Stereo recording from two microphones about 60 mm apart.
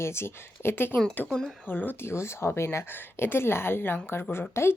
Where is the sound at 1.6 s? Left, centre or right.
Left.